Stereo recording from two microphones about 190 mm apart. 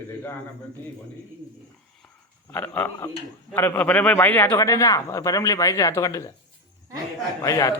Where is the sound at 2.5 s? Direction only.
10° left (ahead or behind).